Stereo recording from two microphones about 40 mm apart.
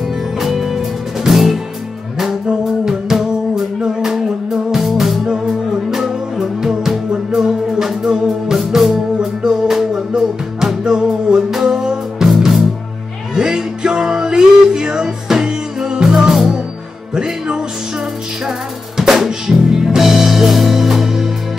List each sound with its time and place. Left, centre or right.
0.4 s music: centre
2.8 s music: centre
4.6 s music: centre
12.3 s music: centre
13.3 s music: centre
18.9 s music: centre